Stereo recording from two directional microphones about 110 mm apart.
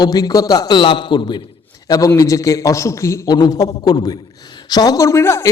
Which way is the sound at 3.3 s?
40° left (ahead or behind).